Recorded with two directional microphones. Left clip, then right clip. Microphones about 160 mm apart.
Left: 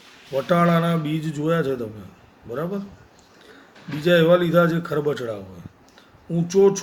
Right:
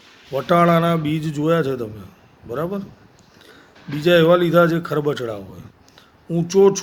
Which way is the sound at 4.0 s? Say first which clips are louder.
Right 3 dB; 65° right (ahead or behind).